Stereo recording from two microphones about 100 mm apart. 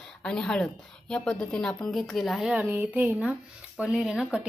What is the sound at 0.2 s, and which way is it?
A woman's voice, 5° left (ahead or behind).